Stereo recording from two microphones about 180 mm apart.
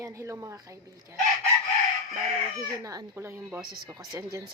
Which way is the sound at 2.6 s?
20° right (ahead or behind).